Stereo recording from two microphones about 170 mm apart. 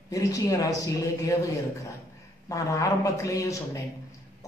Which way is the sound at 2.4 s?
20° left (ahead or behind).